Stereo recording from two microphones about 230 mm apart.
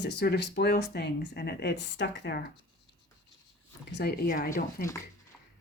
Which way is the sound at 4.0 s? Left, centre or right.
Left.